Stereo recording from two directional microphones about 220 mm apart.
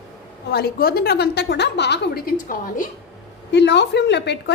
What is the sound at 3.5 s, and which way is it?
A woman's voice, 50° left (ahead or behind).